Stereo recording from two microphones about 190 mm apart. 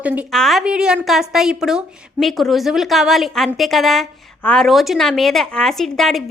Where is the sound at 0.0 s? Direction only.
5° right (ahead or behind).